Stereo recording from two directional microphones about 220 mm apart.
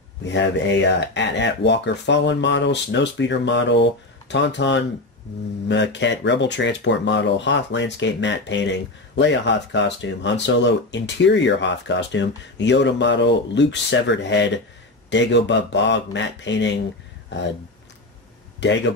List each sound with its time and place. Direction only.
0.2 s speech: 55° left (ahead or behind)